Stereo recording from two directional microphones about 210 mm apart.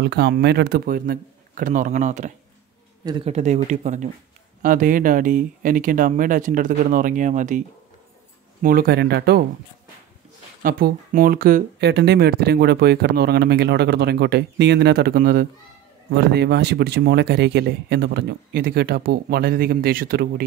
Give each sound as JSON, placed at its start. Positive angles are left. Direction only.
{"t": 0.0, "sound": "speech", "side_deg": -50}
{"t": 8.6, "sound": "speech", "side_deg": -45}
{"t": 10.6, "sound": "speech", "side_deg": -45}